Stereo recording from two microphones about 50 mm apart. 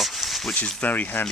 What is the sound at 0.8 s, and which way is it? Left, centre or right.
Speech, left.